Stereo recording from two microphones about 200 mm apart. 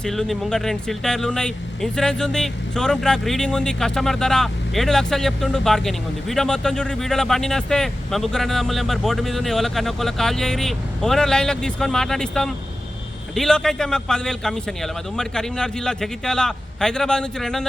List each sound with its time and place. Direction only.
0.0 s speech: centre (ahead or behind)